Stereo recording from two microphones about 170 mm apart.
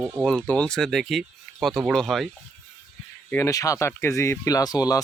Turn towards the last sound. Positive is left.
turn(degrees=20)  # may be behind; listen again after turning